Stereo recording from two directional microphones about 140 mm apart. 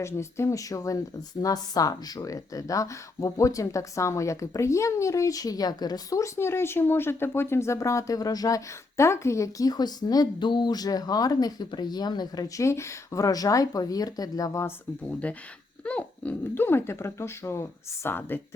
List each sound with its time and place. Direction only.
0.0 s speech: 20° left (ahead or behind)
15.0 s speech: 10° left (ahead or behind)